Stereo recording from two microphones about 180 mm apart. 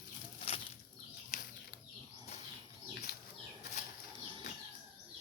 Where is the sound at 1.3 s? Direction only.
40° left (ahead or behind).